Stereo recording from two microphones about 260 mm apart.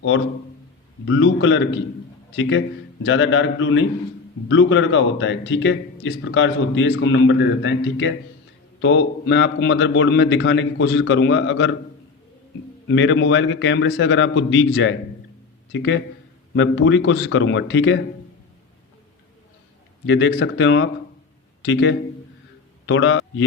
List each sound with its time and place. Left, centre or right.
1.0 s a man's voice: left
12.9 s a man's voice: left
20.1 s a man's voice: left